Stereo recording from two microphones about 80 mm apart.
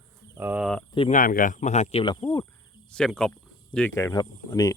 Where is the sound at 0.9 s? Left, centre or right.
Left.